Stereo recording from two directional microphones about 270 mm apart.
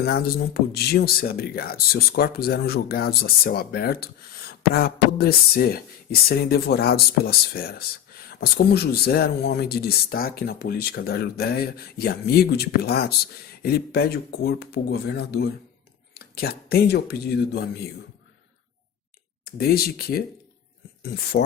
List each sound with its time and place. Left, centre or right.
0.0 s speech: left
19.5 s speech: left